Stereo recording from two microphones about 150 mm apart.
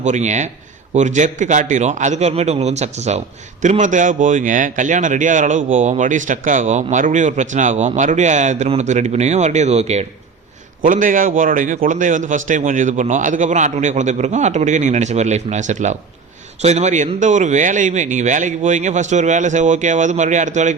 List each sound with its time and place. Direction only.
0.0 s a man's voice: 50° right (ahead or behind)
10.8 s a man's voice: 60° right (ahead or behind)